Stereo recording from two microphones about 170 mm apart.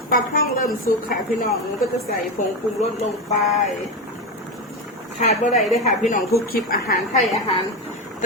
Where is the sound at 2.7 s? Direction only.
40° left (ahead or behind).